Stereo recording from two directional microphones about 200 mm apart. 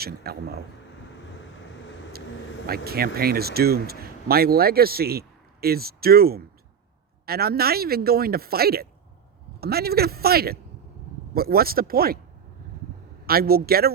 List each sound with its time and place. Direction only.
0.0 s speech: 50° right (ahead or behind)
2.6 s speech: 50° right (ahead or behind)
13.2 s speech: 50° right (ahead or behind)